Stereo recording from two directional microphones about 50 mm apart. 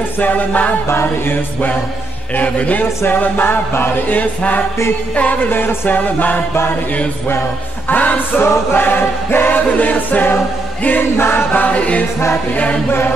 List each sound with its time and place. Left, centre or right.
0.2 s music: left
0.8 s music: left
2.3 s choir: left
3.7 s chant: left
4.2 s choir: left
5.5 s chant: left
5.9 s choir: left
7.9 s choir: left
11.5 s music: left